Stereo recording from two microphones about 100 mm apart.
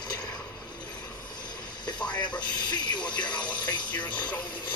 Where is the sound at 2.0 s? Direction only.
50° left (ahead or behind).